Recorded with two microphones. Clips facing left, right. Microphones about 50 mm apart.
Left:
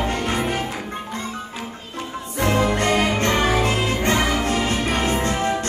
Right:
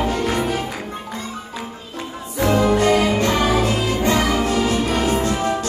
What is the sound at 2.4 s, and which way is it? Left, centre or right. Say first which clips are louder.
Music: right 3 dB; left.